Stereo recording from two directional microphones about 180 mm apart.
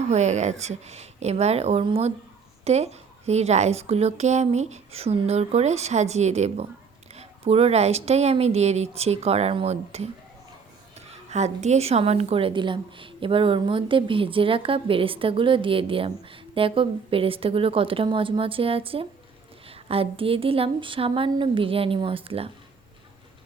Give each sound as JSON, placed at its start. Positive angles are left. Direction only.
{"t": 0.1, "sound": "a woman's voice", "side_deg": -40}
{"t": 11.1, "sound": "a woman's voice", "side_deg": -40}